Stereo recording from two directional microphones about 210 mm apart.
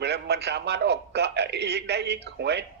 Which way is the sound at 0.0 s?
50° right (ahead or behind).